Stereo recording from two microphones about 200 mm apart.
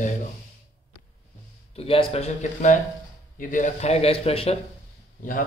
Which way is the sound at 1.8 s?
30° left (ahead or behind).